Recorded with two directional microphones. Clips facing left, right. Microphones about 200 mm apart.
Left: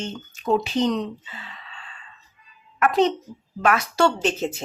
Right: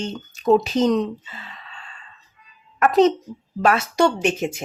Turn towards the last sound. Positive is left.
turn(degrees=-10)  # may be behind; listen again after turning